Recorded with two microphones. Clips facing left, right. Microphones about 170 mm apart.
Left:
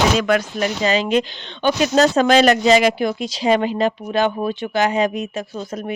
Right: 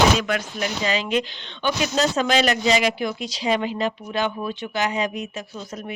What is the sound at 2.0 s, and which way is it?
Speech, 50° left (ahead or behind).